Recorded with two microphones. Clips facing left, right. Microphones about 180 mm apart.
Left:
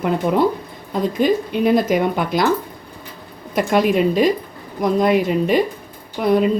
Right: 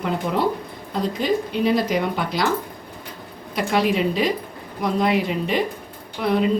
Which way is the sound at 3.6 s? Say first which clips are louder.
Left 4 dB; 50° left (ahead or behind).